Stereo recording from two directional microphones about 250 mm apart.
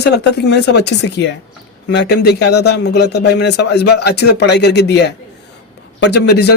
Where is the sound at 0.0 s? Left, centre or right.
Left.